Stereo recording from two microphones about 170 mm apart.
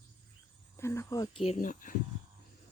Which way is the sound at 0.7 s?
15° left (ahead or behind).